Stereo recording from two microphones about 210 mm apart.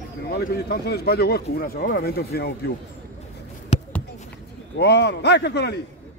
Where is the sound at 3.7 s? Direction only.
30° left (ahead or behind).